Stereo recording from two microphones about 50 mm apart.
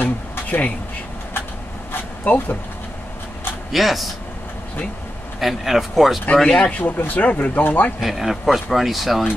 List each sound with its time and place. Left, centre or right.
0.0 s a sound: left
2.2 s speech: left
3.7 s speech: centre
5.4 s speech: centre
6.3 s speech: centre
6.8 s speech: left
7.2 s speech: left
8.0 s speech: centre